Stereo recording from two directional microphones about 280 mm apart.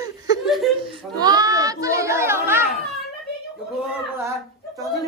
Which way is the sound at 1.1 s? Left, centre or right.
Centre.